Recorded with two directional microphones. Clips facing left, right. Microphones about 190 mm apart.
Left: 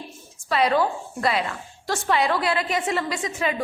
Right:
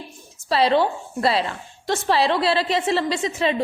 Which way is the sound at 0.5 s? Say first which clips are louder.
Right 2 dB; 30° right (ahead or behind).